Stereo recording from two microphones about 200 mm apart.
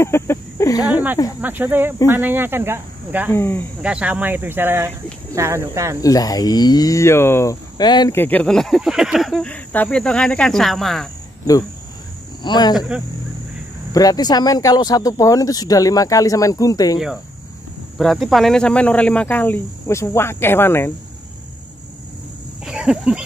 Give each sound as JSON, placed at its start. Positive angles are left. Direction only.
{"t": 0.0, "sound": "a sound", "side_deg": 15}
{"t": 1.4, "sound": "speech", "side_deg": -10}
{"t": 3.3, "sound": "speech", "side_deg": 10}
{"t": 3.8, "sound": "speech", "side_deg": -5}
{"t": 5.9, "sound": "speech", "side_deg": 15}
{"t": 12.4, "sound": "speech", "side_deg": 20}
{"t": 12.7, "sound": "speech", "side_deg": -5}
{"t": 13.9, "sound": "speech", "side_deg": 20}
{"t": 17.9, "sound": "speech", "side_deg": 0}
{"t": 22.7, "sound": "speech", "side_deg": -5}